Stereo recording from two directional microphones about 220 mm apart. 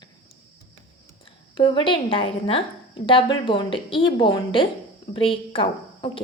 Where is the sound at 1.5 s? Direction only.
20° left (ahead or behind).